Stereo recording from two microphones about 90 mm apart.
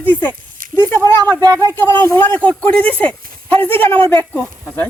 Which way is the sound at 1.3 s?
45° right (ahead or behind).